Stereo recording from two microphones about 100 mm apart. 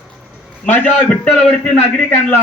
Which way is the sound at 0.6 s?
15° left (ahead or behind).